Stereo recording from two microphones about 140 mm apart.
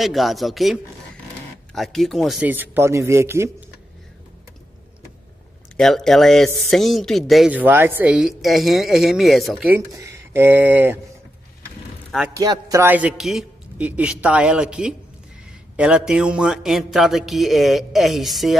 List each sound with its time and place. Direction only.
0.0 s music: centre (ahead or behind)
2.4 s a man's voice: 15° right (ahead or behind)
5.8 s music: centre (ahead or behind)
7.5 s music: 15° right (ahead or behind)
9.7 s speech: 20° right (ahead or behind)
12.4 s a man's voice: 25° right (ahead or behind)
12.8 s speech: 10° right (ahead or behind)
15.7 s music: 5° right (ahead or behind)